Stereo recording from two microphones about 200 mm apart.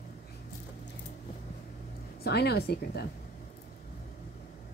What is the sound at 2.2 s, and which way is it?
Speech, 55° left (ahead or behind).